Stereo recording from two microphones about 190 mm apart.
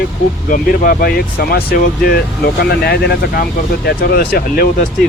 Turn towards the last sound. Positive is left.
turn(degrees=50)  # may be behind; listen again after turning